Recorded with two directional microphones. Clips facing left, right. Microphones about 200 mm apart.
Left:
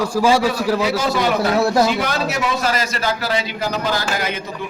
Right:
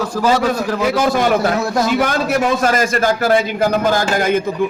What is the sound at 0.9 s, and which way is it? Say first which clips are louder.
A man's voice: right 4 dB; 50° right (ahead or behind).